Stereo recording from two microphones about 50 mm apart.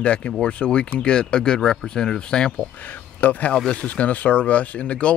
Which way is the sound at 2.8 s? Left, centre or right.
Left.